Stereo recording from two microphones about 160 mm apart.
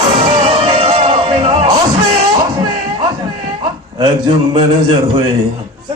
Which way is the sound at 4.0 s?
30° right (ahead or behind).